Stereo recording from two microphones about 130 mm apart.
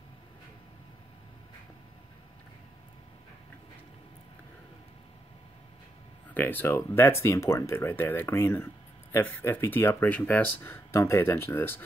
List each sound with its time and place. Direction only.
6.3 s speech: 15° left (ahead or behind)